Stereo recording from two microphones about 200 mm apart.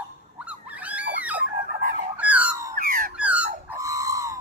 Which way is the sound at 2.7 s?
45° right (ahead or behind).